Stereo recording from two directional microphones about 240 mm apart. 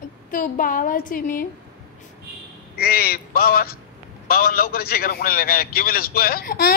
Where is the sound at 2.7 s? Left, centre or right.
Left.